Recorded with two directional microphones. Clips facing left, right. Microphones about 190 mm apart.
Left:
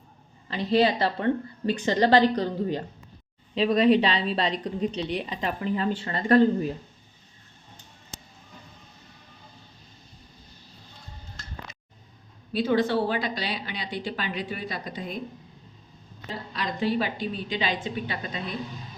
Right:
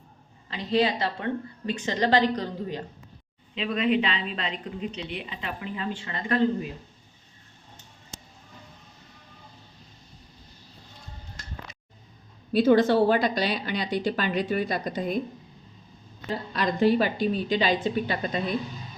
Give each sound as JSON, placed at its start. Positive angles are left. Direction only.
{"t": 0.5, "sound": "a woman's voice", "side_deg": 35}
{"t": 12.5, "sound": "a woman's voice", "side_deg": -45}
{"t": 16.5, "sound": "a woman's voice", "side_deg": -45}